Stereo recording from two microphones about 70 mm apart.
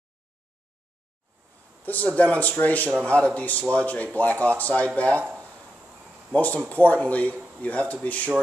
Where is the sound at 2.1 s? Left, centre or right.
Left.